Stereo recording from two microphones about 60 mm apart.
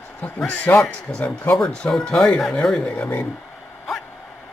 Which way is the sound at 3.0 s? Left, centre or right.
Left.